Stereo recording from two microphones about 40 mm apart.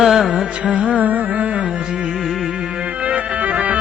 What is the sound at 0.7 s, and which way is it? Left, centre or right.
Carnatic music, right.